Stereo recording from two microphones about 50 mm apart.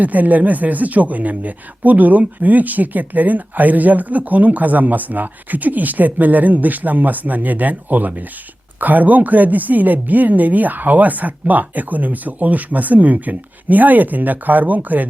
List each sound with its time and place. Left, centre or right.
0.0 s speech: right